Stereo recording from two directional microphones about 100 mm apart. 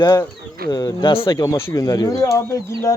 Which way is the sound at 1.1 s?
65° left (ahead or behind).